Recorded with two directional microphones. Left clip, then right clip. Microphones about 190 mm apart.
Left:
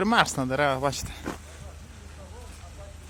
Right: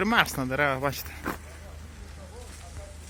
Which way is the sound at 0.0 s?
20° left (ahead or behind).